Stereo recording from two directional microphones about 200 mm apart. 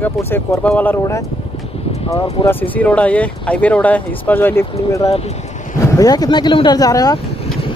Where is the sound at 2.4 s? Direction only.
10° left (ahead or behind).